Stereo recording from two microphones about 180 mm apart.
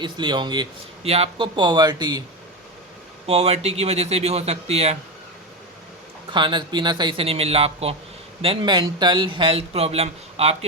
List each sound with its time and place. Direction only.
0.0 s speech: 25° right (ahead or behind)
3.2 s speech: 35° right (ahead or behind)
6.3 s speech: 25° right (ahead or behind)